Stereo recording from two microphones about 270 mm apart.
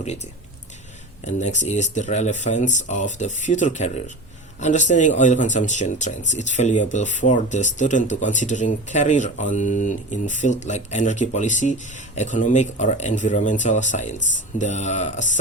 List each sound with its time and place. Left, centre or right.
1.2 s speech: left